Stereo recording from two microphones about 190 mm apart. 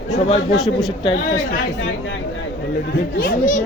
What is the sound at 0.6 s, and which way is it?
Speech, centre (ahead or behind).